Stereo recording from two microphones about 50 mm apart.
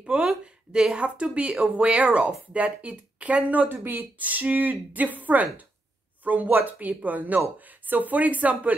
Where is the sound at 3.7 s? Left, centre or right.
Right.